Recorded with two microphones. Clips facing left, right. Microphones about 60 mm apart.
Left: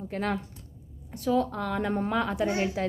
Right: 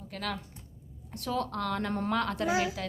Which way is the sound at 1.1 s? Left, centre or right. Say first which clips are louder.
Left 6 dB; centre.